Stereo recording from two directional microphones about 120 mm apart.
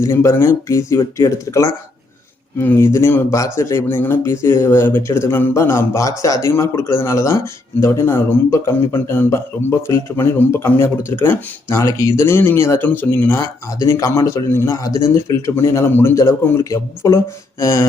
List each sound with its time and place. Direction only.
0.0 s speech: 25° left (ahead or behind)